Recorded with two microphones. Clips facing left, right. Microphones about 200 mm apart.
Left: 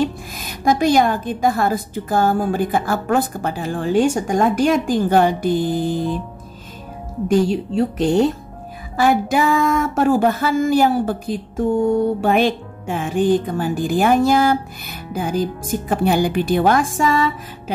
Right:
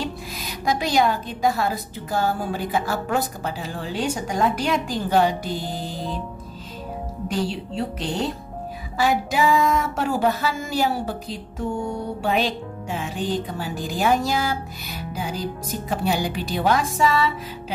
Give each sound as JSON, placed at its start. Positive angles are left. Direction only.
{"t": 0.0, "sound": "speech", "side_deg": 50}
{"t": 7.2, "sound": "speech", "side_deg": 45}